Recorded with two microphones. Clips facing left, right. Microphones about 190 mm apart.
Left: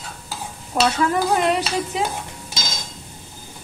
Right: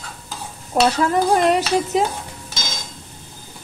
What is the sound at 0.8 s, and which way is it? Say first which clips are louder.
Stir: even; 35° right (ahead or behind).